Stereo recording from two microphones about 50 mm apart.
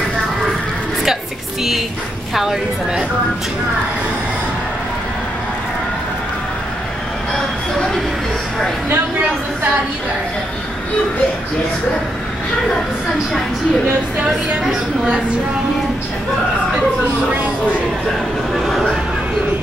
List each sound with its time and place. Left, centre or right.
2.3 s a woman's voice: centre
8.9 s speech: right
14.2 s a woman's voice: centre
18.5 s speech: centre